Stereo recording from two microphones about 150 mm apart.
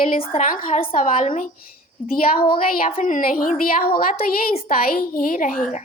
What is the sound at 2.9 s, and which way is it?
A woman's voice, 60° left (ahead or behind).